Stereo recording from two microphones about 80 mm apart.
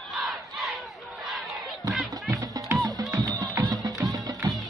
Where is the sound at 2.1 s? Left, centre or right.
Right.